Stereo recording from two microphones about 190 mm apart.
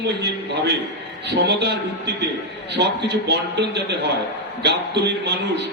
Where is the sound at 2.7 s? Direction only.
65° right (ahead or behind).